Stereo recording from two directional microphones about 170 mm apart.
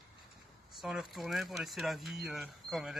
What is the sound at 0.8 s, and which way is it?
Speech, centre (ahead or behind).